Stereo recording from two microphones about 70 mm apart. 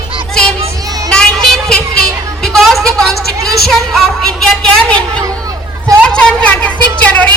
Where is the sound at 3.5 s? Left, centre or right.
Centre.